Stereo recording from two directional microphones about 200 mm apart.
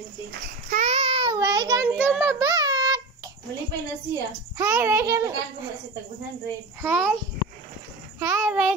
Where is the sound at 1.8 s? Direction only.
5° right (ahead or behind).